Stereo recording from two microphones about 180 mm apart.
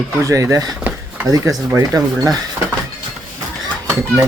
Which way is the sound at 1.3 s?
20° right (ahead or behind).